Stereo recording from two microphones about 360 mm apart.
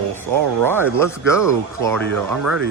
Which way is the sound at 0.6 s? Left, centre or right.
Centre.